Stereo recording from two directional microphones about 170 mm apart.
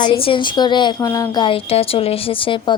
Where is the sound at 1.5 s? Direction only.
35° left (ahead or behind).